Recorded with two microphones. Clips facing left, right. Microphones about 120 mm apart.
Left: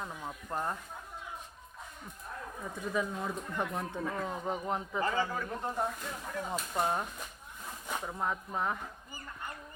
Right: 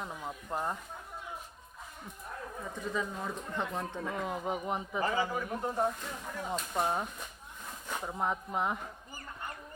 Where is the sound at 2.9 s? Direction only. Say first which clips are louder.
Left 3 dB; 5° left (ahead or behind).